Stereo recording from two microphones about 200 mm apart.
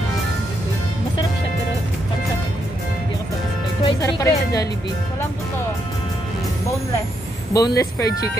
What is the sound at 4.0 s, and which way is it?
Speech, 15° left (ahead or behind).